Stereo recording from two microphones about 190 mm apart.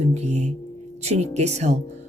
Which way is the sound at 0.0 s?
35° right (ahead or behind).